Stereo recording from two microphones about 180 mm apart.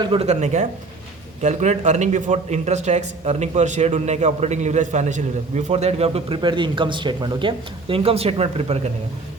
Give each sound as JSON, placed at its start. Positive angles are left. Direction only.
{"t": 0.0, "sound": "a man's voice", "side_deg": -30}